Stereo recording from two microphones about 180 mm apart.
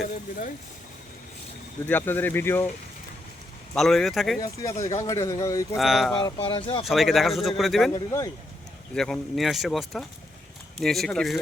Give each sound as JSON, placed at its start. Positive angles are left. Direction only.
{"t": 0.1, "sound": "speech", "side_deg": 45}
{"t": 1.9, "sound": "speech", "side_deg": 10}
{"t": 3.8, "sound": "speech", "side_deg": 0}
{"t": 4.9, "sound": "a man's voice", "side_deg": 20}
{"t": 5.7, "sound": "speech", "side_deg": 0}
{"t": 6.2, "sound": "speech", "side_deg": 30}
{"t": 6.8, "sound": "speech", "side_deg": 0}
{"t": 7.9, "sound": "speech", "side_deg": 20}
{"t": 9.0, "sound": "speech", "side_deg": 5}